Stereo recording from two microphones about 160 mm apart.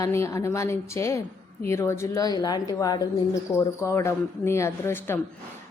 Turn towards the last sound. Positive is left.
turn(degrees=15)  # may be behind; listen again after turning